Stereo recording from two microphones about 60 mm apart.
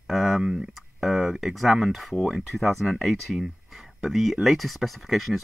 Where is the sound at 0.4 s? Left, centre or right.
Centre.